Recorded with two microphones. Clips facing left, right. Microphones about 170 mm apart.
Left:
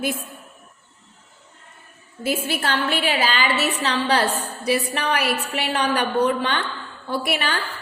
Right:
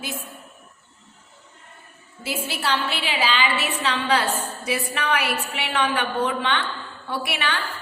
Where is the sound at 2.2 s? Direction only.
50° left (ahead or behind).